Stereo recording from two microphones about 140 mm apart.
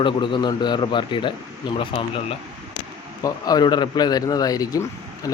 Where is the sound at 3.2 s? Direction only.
30° left (ahead or behind).